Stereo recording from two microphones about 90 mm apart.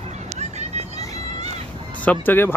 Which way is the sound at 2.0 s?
20° left (ahead or behind).